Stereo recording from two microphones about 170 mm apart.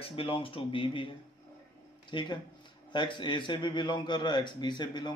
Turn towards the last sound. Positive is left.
turn(degrees=25)  # may be behind; listen again after turning